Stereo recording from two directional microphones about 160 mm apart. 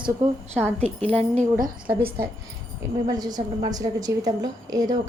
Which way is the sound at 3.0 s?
25° right (ahead or behind).